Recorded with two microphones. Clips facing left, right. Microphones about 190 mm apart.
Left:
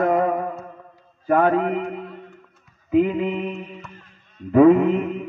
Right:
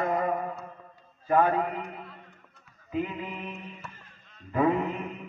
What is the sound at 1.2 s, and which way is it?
Speech, 65° left (ahead or behind).